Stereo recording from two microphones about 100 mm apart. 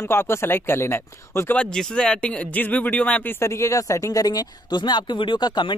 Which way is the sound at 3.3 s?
30° left (ahead or behind).